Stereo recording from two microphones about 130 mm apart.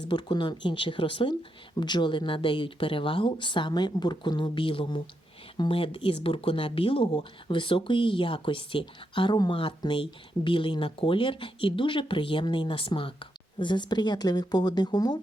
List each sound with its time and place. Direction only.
0.1 s speech: 35° left (ahead or behind)